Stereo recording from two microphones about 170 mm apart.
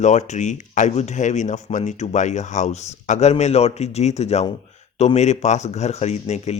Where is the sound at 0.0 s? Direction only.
45° left (ahead or behind).